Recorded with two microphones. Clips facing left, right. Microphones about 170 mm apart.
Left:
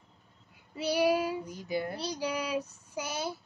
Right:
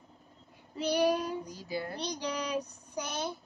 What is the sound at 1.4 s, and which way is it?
Speech, 20° left (ahead or behind).